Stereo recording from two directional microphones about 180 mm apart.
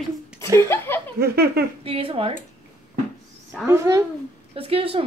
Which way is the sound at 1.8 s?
30° right (ahead or behind).